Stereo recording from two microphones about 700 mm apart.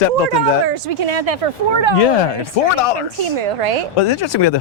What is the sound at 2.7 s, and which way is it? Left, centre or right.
Speech, left.